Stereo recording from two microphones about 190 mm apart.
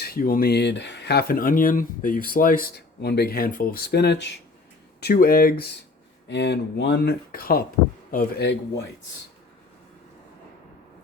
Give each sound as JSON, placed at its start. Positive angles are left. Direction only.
{"t": 0.0, "sound": "speech", "side_deg": 50}
{"t": 6.2, "sound": "speech", "side_deg": 65}